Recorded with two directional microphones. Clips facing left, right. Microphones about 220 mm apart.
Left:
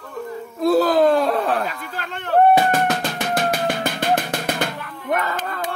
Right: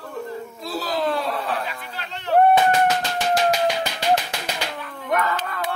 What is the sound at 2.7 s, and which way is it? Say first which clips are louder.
Music: even; 55° left (ahead or behind).